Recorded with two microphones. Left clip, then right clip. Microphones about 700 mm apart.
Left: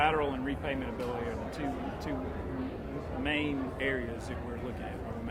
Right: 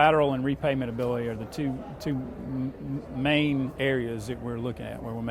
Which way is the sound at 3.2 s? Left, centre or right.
Right.